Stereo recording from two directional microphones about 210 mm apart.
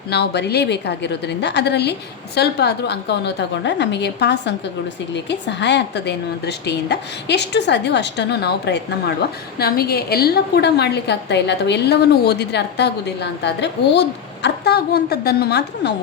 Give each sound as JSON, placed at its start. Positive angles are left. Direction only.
{"t": 0.1, "sound": "a woman's voice", "side_deg": 50}